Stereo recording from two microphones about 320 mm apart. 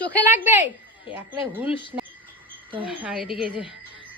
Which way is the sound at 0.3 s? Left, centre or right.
Centre.